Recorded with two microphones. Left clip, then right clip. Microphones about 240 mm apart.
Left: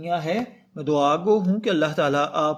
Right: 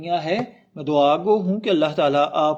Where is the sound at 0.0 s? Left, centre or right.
Left.